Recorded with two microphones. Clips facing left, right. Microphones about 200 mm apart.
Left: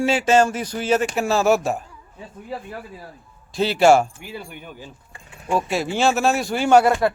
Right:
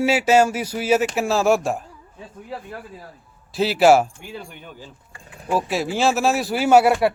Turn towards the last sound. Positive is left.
turn(degrees=-10)  # may be behind; listen again after turning